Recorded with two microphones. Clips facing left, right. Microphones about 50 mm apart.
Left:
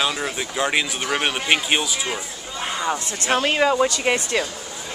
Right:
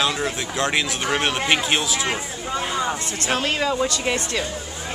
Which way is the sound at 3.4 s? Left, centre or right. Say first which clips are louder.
Left 5 dB; left.